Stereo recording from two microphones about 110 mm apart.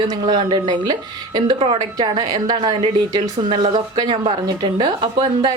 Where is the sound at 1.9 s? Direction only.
35° right (ahead or behind).